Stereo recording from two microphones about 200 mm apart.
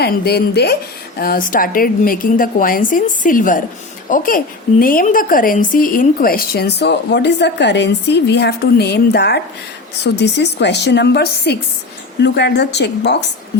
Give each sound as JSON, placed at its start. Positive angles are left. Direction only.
{"t": 0.0, "sound": "a woman's voice", "side_deg": 55}